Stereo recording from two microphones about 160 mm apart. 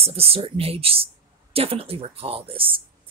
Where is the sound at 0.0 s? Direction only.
40° right (ahead or behind).